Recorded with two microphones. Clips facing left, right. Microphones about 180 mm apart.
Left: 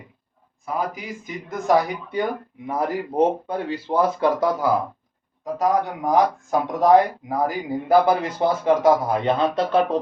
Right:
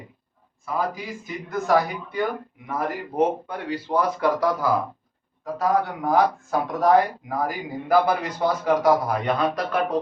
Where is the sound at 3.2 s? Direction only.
30° left (ahead or behind).